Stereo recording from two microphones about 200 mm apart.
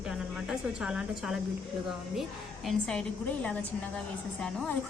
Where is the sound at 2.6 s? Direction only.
5° left (ahead or behind).